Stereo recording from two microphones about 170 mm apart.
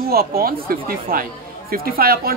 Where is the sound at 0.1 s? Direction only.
60° right (ahead or behind).